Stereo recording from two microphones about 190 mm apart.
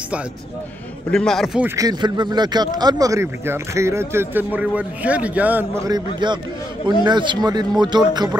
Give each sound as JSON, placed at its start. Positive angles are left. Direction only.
{"t": 1.1, "sound": "speech", "side_deg": 0}
{"t": 1.8, "sound": "a man's voice", "side_deg": -20}